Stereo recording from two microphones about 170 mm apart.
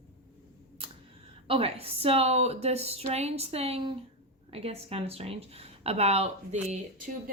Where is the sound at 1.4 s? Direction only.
35° right (ahead or behind).